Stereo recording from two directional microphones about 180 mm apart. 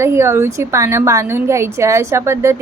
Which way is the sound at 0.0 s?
15° right (ahead or behind).